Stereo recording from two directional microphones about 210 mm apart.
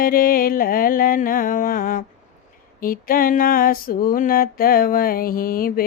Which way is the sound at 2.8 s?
45° left (ahead or behind).